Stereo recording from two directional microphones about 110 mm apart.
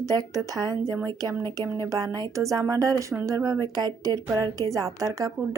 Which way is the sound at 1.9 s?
30° right (ahead or behind).